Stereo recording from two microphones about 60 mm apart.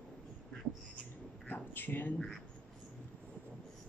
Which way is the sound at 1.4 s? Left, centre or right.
Left.